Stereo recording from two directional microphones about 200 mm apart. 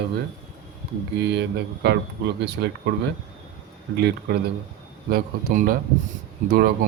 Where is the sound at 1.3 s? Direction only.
60° right (ahead or behind).